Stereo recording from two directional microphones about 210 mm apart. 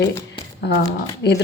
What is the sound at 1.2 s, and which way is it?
Speech, 55° left (ahead or behind).